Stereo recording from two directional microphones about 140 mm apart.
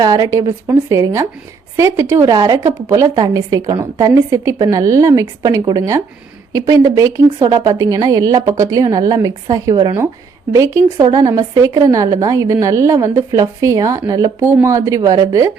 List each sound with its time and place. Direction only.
0.0 s a woman's voice: 30° right (ahead or behind)